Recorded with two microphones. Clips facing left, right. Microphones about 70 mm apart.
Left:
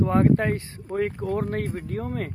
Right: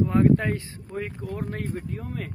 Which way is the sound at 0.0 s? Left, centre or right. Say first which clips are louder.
Even; left.